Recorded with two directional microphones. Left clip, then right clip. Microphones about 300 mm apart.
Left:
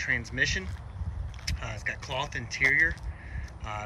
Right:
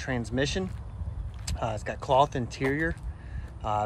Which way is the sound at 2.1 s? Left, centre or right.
Centre.